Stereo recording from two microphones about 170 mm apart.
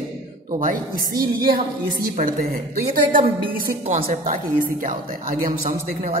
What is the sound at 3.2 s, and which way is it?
Speech, 35° right (ahead or behind).